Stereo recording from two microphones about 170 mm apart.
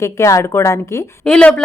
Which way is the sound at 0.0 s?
15° left (ahead or behind).